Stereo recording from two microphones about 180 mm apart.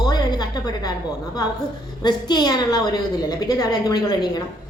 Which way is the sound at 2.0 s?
25° left (ahead or behind).